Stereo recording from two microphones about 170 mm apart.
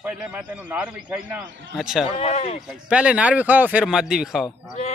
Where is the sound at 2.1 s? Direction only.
35° left (ahead or behind).